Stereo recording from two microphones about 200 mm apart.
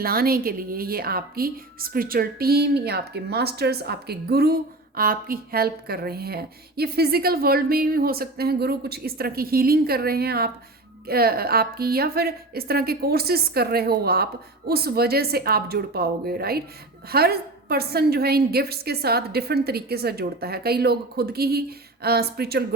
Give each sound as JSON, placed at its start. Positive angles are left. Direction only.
{"t": 0.0, "sound": "a woman's voice", "side_deg": -50}